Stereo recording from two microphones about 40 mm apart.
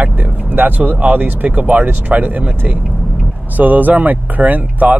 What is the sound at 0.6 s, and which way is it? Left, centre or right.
Speech, right.